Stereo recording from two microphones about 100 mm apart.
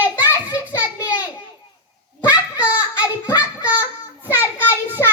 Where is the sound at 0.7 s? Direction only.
40° left (ahead or behind).